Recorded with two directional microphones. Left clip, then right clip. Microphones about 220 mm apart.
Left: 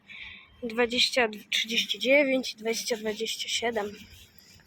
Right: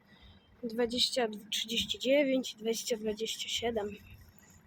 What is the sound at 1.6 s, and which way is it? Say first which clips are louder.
Speech: left 6 dB; 20° left (ahead or behind).